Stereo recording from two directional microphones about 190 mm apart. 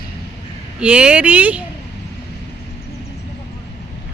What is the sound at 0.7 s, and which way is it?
Speech, 5° right (ahead or behind).